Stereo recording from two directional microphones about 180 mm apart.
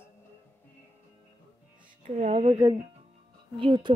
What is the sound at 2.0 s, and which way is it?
Speech, 40° right (ahead or behind).